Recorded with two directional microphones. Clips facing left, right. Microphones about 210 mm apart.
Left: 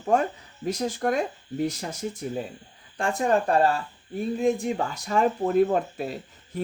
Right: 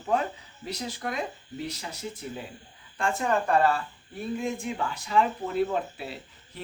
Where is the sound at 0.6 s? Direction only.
50° left (ahead or behind).